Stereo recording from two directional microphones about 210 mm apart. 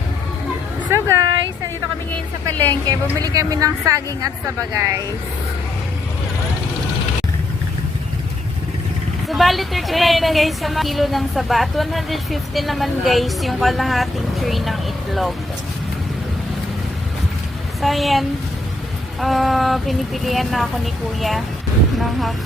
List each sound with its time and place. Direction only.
0.9 s a sound: 15° right (ahead or behind)
2.9 s a woman's voice: 15° right (ahead or behind)
9.3 s a woman's voice: centre (ahead or behind)
17.7 s a woman's voice: centre (ahead or behind)